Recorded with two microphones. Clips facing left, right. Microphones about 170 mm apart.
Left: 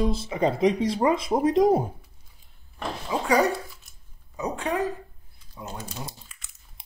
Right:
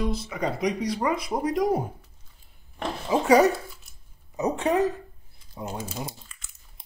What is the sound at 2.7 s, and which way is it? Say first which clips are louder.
A woman's voice: right 4 dB; 20° right (ahead or behind).